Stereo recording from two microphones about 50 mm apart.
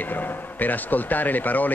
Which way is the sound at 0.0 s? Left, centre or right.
Left.